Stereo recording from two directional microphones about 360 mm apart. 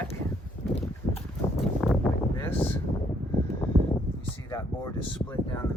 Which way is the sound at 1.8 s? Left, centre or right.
Centre.